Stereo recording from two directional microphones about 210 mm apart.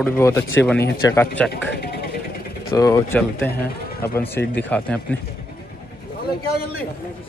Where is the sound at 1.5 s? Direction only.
50° left (ahead or behind).